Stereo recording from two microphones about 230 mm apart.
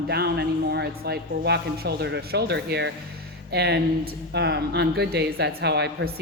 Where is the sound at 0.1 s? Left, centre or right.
Right.